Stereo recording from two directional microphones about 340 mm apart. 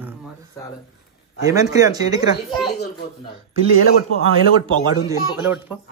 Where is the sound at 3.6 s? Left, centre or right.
Right.